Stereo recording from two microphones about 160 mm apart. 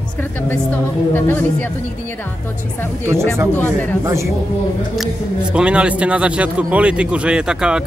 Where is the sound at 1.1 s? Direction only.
15° left (ahead or behind).